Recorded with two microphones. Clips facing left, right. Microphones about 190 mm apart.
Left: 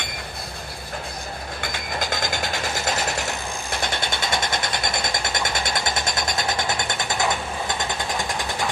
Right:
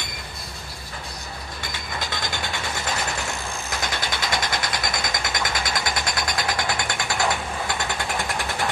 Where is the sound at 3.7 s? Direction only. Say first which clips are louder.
Left 2 dB; 30° left (ahead or behind).